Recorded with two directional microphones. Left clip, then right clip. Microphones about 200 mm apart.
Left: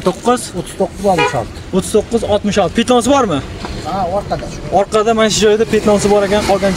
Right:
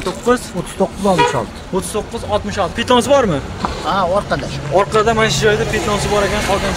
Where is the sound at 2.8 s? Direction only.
5° left (ahead or behind).